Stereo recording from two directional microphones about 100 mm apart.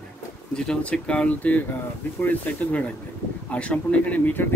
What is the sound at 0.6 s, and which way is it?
Speech, 5° left (ahead or behind).